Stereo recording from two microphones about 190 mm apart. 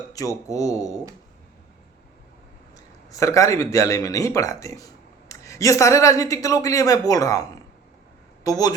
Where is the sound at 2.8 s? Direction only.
15° left (ahead or behind).